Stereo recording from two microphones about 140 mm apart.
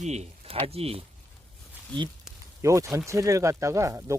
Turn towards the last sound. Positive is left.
turn(degrees=-20)  # may be behind; listen again after turning